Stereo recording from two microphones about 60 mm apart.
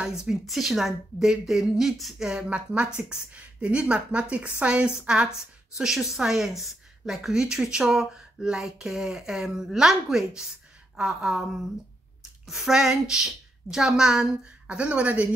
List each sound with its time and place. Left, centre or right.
0.0 s a woman's voice: centre
2.2 s a woman's voice: centre
14.4 s speech: right